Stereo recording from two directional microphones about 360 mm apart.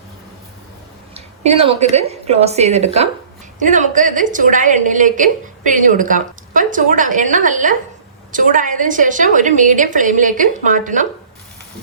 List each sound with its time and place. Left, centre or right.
1.1 s a woman's voice: centre